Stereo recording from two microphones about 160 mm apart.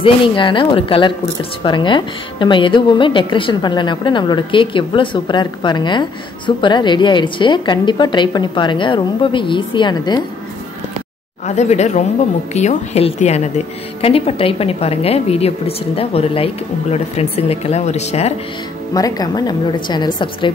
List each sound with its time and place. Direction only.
0.0 s a woman's voice: 30° left (ahead or behind)
11.4 s a woman's voice: 45° left (ahead or behind)
18.9 s a woman's voice: 25° left (ahead or behind)